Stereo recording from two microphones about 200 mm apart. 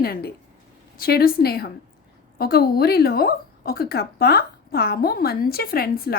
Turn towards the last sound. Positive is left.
turn(degrees=50)  # may be behind; listen again after turning